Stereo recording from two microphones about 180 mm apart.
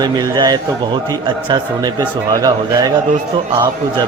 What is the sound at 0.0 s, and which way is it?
Speech, 20° right (ahead or behind).